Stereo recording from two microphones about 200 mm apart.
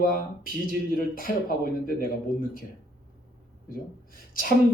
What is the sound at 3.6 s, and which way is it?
Speech, 45° left (ahead or behind).